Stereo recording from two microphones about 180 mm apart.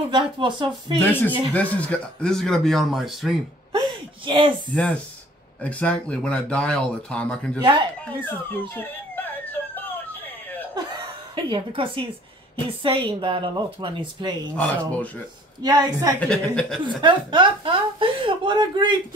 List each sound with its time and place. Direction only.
0.1 s speech: 25° right (ahead or behind)
0.9 s speech: 10° left (ahead or behind)
4.3 s speech: 25° right (ahead or behind)
4.7 s speech: 5° left (ahead or behind)
8.0 s a sound: 10° left (ahead or behind)
11.3 s a woman's voice: 25° right (ahead or behind)
14.5 s speech: 5° left (ahead or behind)
15.6 s speech: 25° right (ahead or behind)
16.2 s speech: 5° left (ahead or behind)
17.0 s speech: 25° right (ahead or behind)